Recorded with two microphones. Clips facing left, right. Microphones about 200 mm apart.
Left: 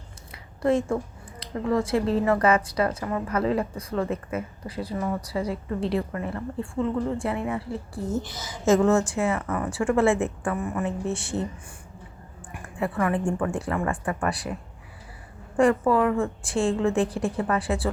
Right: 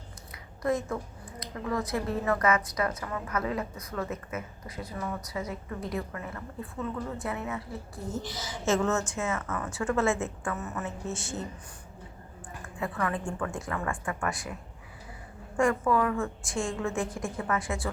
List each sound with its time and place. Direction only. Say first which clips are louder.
0.3 s a sound: left 6 dB; 30° left (ahead or behind)
1.4 s a woman's voice: left 7 dB; 30° left (ahead or behind)
12.8 s a woman's voice: left 7 dB; 30° left (ahead or behind)
15.5 s a woman's voice: left 5 dB; 35° left (ahead or behind)